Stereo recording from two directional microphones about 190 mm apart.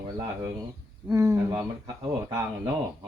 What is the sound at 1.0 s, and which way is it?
Speech, 15° right (ahead or behind).